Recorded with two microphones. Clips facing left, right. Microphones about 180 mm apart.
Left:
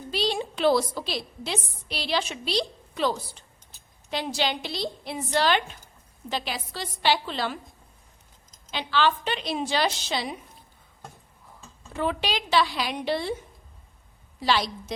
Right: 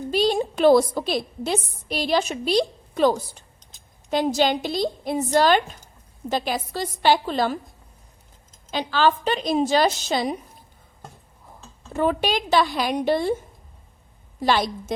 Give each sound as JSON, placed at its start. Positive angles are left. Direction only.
{"t": 0.1, "sound": "a woman's voice", "side_deg": -45}
{"t": 8.7, "sound": "a woman's voice", "side_deg": -40}
{"t": 11.9, "sound": "a woman's voice", "side_deg": -45}